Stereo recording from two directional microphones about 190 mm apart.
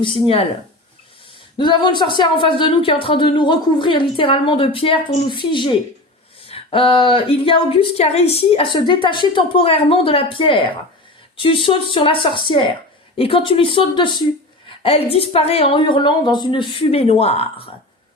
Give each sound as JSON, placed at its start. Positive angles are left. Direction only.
{"t": 0.0, "sound": "speech", "side_deg": 30}
{"t": 1.5, "sound": "speech", "side_deg": 25}